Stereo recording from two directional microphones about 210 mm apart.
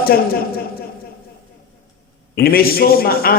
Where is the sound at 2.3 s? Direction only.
45° left (ahead or behind).